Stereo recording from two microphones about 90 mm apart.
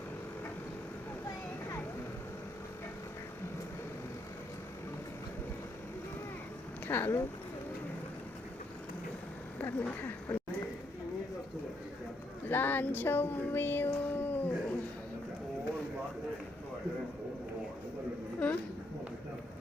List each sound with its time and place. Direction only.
6.8 s speech: 25° left (ahead or behind)
9.6 s speech: 20° left (ahead or behind)
12.5 s speech: 20° left (ahead or behind)
18.4 s a sound: 15° left (ahead or behind)